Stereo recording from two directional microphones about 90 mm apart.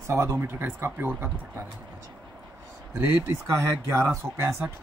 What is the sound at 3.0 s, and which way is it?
Speech, 30° right (ahead or behind).